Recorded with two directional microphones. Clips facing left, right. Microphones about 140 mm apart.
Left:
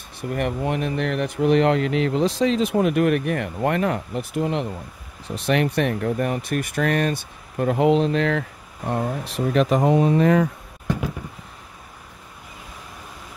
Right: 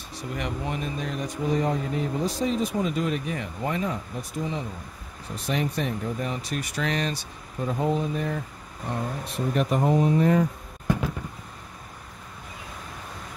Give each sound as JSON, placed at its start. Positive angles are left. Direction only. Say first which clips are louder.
{"t": 0.1, "sound": "speech", "louder": "left 7 dB", "side_deg": 55}